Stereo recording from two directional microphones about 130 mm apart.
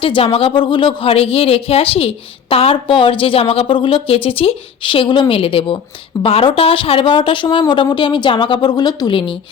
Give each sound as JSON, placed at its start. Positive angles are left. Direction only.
{"t": 0.0, "sound": "a woman's voice", "side_deg": 45}